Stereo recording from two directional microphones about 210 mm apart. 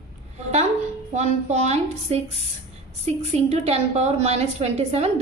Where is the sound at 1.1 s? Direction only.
35° right (ahead or behind).